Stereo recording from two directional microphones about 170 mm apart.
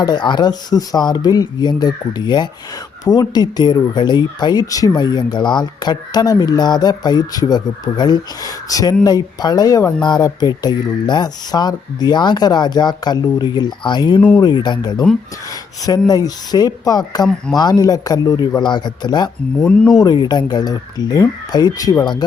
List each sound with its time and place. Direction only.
0.0 s speech: 25° left (ahead or behind)
14.2 s speech: 10° left (ahead or behind)
14.4 s speech: 25° left (ahead or behind)
16.0 s speech: 20° left (ahead or behind)
19.6 s speech: 5° left (ahead or behind)
20.0 s speech: 25° left (ahead or behind)